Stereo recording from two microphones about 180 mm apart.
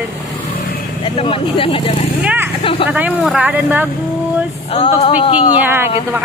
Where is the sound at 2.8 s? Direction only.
10° right (ahead or behind).